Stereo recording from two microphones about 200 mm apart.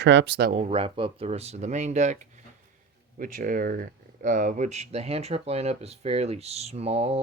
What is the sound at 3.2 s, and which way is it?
Speech, 45° right (ahead or behind).